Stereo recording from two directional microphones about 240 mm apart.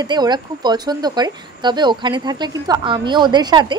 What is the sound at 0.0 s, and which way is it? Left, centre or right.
A woman's voice, centre.